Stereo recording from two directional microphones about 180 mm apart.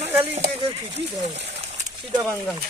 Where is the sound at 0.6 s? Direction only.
35° right (ahead or behind).